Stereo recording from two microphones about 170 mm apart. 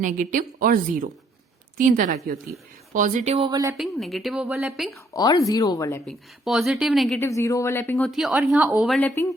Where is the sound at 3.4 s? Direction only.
25° right (ahead or behind).